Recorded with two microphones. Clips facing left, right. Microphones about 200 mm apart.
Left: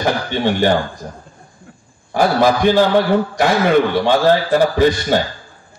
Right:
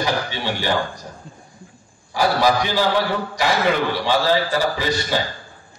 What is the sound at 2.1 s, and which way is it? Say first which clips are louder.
Speech: left 4 dB; 50° left (ahead or behind).